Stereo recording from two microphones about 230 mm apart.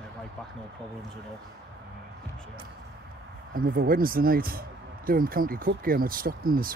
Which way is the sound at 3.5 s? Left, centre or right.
Right.